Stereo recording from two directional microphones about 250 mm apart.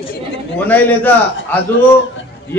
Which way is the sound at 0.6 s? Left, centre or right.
Centre.